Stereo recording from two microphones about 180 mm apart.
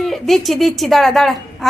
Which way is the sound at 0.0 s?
Centre (ahead or behind).